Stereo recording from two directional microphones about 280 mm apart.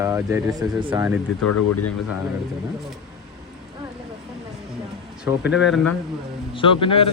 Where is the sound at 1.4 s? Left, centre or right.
Left.